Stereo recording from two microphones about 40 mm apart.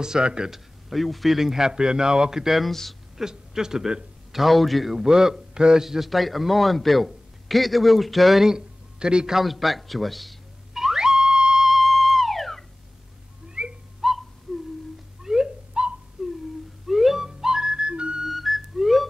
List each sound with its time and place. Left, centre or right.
0.0 s speech: centre
0.5 s a man's voice: centre
2.7 s speech: centre
3.2 s a man's voice: centre
4.9 s a man's voice: centre
8.5 s a sound: centre
9.3 s car alarm: centre
13.6 s a sound: right
14.0 s a sound: centre
15.2 s a sound: centre
16.2 s wail: centre
16.8 s music: centre; by 18.2 s right
18.2 s music: centre